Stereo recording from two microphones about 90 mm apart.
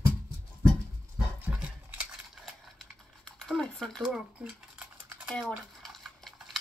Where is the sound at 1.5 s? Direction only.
15° right (ahead or behind).